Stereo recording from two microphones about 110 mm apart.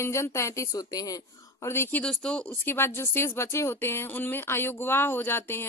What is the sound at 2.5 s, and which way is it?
A woman's voice, 20° left (ahead or behind).